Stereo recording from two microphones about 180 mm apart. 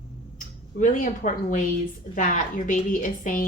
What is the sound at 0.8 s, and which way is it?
A woman's voice, 45° left (ahead or behind).